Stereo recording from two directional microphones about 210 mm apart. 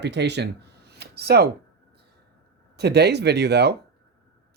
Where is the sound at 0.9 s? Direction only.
50° right (ahead or behind).